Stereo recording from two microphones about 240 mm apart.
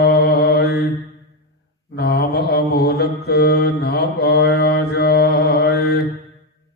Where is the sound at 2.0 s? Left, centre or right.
Left.